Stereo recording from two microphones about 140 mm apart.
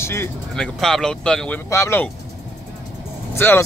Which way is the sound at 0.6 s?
5° left (ahead or behind).